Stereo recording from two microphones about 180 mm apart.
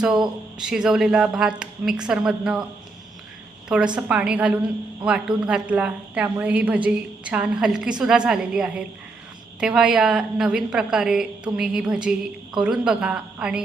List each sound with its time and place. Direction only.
0.6 s a woman's voice: 5° right (ahead or behind)
3.9 s a woman's voice: 5° right (ahead or behind)